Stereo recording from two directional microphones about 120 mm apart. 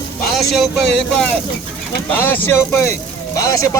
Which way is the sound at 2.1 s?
15° left (ahead or behind).